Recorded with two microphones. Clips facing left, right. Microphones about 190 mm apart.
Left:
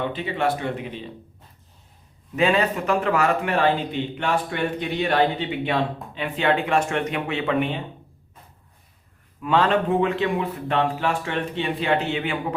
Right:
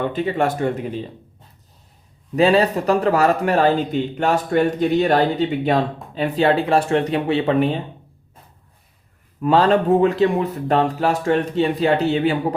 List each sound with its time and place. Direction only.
0.0 s speech: 45° right (ahead or behind)
2.3 s a man's voice: 35° right (ahead or behind)
9.4 s a man's voice: 40° right (ahead or behind)